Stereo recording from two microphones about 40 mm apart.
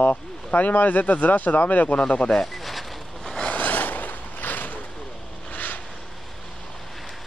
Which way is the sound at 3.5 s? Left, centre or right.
Left.